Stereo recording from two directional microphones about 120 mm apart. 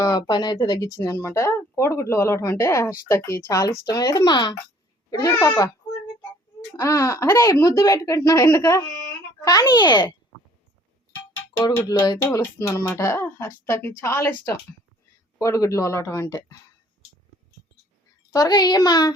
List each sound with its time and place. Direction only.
0.0 s speech: 35° left (ahead or behind)
6.7 s speech: 25° left (ahead or behind)
11.9 s speech: 35° left (ahead or behind)
18.3 s a woman's voice: 35° left (ahead or behind)